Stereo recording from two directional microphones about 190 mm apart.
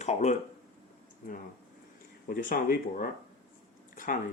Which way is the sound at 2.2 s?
45° left (ahead or behind).